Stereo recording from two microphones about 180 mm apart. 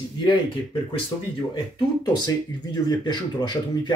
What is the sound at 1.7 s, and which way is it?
Speech, 25° left (ahead or behind).